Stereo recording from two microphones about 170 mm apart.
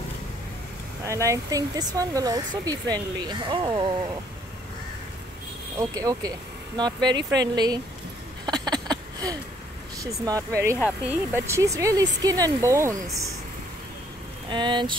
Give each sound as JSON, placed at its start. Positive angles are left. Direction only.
{"t": 1.0, "sound": "speech", "side_deg": -15}
{"t": 5.8, "sound": "speech", "side_deg": -20}
{"t": 8.5, "sound": "a sound", "side_deg": -25}
{"t": 10.2, "sound": "speech", "side_deg": -20}
{"t": 14.5, "sound": "speech", "side_deg": -25}